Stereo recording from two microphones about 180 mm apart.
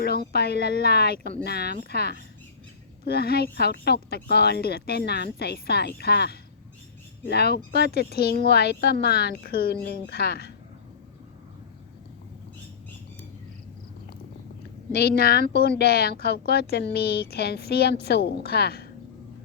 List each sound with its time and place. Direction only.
0.3 s a woman's voice: 60° left (ahead or behind)
14.9 s a woman's voice: 60° left (ahead or behind)